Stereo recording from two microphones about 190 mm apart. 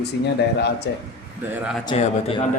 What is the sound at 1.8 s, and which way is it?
Speech, 30° left (ahead or behind).